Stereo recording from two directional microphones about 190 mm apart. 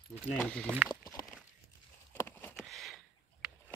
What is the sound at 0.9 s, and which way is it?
Walk, 20° left (ahead or behind).